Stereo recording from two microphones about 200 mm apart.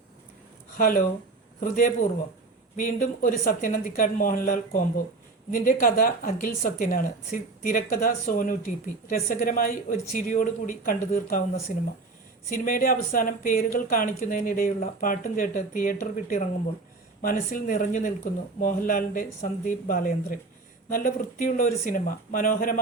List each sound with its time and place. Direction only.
0.8 s a woman's voice: 45° left (ahead or behind)